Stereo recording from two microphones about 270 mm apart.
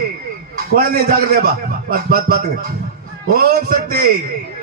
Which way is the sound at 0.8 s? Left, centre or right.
Right.